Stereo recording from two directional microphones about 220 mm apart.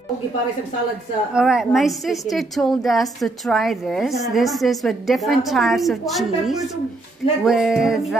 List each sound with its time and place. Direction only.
1.3 s a woman's voice: centre (ahead or behind)